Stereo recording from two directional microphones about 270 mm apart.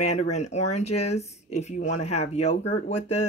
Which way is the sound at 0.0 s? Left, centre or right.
Left.